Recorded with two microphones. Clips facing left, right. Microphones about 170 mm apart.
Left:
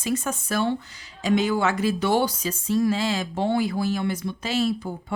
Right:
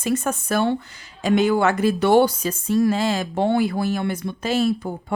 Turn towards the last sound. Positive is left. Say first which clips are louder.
# right 4 dB
turn(degrees=-50)  # may be behind; listen again after turning